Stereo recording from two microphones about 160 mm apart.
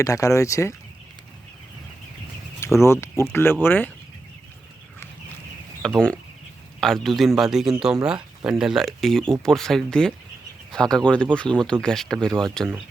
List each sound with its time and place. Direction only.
0.0 s speech: 20° left (ahead or behind)
2.6 s speech: 15° left (ahead or behind)
5.8 s speech: 5° left (ahead or behind)